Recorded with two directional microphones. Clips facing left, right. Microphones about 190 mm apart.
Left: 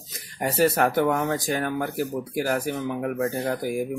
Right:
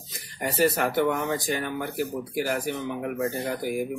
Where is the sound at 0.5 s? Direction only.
45° left (ahead or behind).